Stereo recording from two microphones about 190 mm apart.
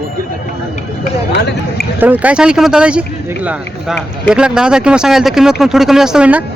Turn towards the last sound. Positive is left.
turn(degrees=-5)  # may be behind; listen again after turning